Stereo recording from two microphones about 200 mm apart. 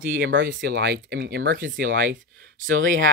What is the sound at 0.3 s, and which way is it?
Speech, 65° right (ahead or behind).